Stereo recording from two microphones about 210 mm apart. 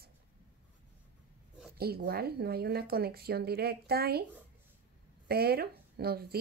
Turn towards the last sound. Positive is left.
turn(degrees=-50)  # may be behind; listen again after turning